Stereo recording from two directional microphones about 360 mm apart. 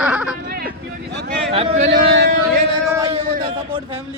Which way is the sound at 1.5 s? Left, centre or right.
Centre.